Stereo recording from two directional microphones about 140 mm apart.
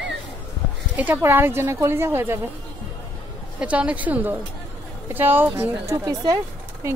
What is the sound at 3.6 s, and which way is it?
Speech, 10° right (ahead or behind).